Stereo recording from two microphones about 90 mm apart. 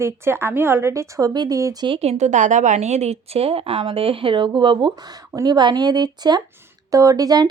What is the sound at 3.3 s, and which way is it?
Speech, 90° right.